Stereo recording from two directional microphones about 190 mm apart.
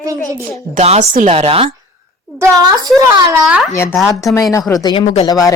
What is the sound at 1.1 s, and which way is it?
Speech, 45° right (ahead or behind).